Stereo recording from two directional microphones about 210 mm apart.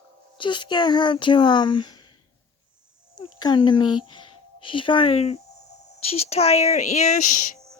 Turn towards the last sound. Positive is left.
turn(degrees=40)  # may be behind; listen again after turning